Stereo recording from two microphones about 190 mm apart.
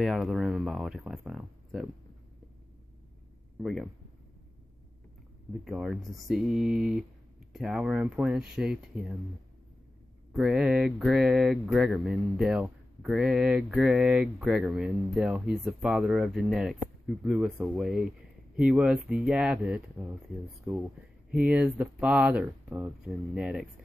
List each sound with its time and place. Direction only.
0.0 s speech: centre (ahead or behind)
3.5 s speech: 5° right (ahead or behind)
5.7 s speech: 5° right (ahead or behind)
10.3 s speech: 5° right (ahead or behind)
21.3 s speech: 5° right (ahead or behind)